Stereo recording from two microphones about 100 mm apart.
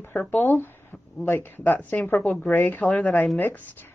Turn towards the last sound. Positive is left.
turn(degrees=20)  # may be behind; listen again after turning